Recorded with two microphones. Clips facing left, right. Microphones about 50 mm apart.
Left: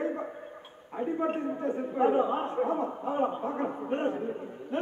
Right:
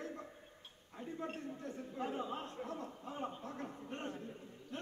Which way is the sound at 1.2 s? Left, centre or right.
Left.